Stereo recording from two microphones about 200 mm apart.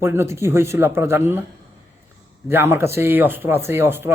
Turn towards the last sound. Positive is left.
turn(degrees=-10)  # may be behind; listen again after turning